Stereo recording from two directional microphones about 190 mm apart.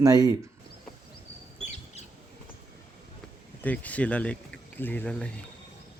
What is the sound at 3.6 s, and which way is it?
Speech, 10° left (ahead or behind).